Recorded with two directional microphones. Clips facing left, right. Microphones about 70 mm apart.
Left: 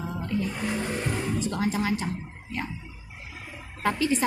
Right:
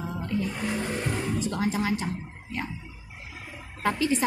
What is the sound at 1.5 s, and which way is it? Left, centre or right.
Speech, centre.